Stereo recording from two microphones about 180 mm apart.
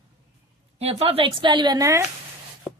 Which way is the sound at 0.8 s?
35° right (ahead or behind).